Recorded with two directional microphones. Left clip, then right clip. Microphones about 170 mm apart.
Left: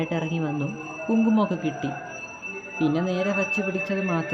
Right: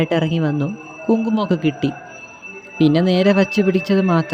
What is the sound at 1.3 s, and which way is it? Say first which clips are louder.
Speech: right 4 dB; 40° right (ahead or behind).